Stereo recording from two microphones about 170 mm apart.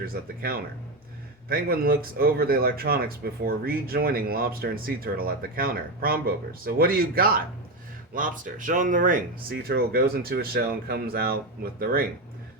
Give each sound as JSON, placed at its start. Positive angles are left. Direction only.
{"t": 0.0, "sound": "speech", "side_deg": -60}